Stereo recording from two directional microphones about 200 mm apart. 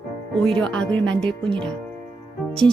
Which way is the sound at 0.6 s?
5° left (ahead or behind).